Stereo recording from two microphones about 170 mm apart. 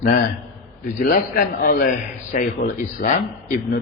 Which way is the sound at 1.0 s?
55° left (ahead or behind).